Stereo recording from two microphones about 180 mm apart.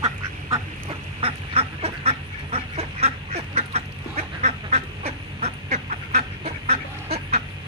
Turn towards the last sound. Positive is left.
turn(degrees=-35)  # may be behind; listen again after turning